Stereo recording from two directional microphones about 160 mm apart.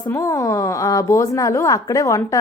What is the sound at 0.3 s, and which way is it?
Speech, 20° left (ahead or behind).